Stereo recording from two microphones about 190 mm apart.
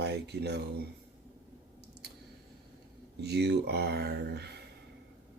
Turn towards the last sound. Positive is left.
turn(degrees=-60)  # may be behind; listen again after turning